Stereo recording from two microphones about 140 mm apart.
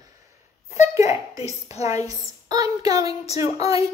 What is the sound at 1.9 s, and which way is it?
A woman's voice, 25° right (ahead or behind).